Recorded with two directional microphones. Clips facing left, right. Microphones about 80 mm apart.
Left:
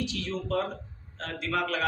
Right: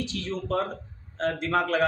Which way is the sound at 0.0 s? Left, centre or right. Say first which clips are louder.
Right 1 dB; right.